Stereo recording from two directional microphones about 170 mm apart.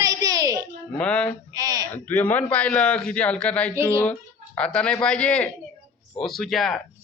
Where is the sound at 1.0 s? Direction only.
5° left (ahead or behind).